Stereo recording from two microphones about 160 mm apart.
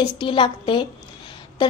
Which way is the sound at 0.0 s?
30° left (ahead or behind).